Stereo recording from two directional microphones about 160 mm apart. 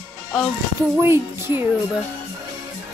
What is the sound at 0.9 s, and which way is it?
Speech, 15° right (ahead or behind).